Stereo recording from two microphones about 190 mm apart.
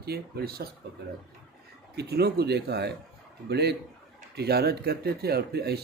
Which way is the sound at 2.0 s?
55° right (ahead or behind).